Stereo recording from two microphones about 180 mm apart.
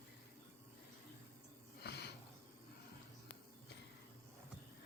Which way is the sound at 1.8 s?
65° left (ahead or behind).